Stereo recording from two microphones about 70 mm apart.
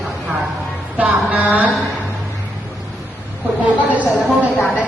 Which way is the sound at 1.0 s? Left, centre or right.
Right.